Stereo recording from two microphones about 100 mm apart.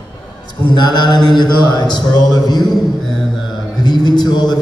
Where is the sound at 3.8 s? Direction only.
45° left (ahead or behind).